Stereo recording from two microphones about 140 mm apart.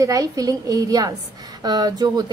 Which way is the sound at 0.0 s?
25° right (ahead or behind).